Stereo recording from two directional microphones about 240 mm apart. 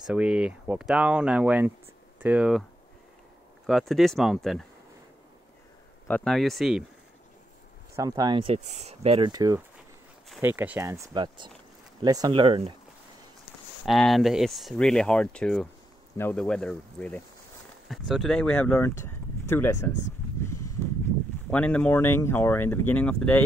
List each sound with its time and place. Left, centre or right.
0.0 s speech: centre
3.6 s speech: centre
6.0 s speech: centre
7.9 s speech: centre
13.8 s speech: centre
20.4 s a sound: centre
21.5 s speech: centre